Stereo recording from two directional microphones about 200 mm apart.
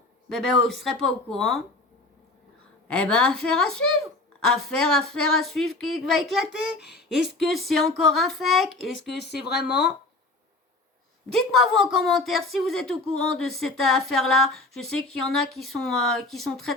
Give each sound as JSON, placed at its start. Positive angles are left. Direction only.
{"t": 0.3, "sound": "speech", "side_deg": 0}
{"t": 2.8, "sound": "speech", "side_deg": 5}
{"t": 9.0, "sound": "speech", "side_deg": 55}
{"t": 11.3, "sound": "speech", "side_deg": 0}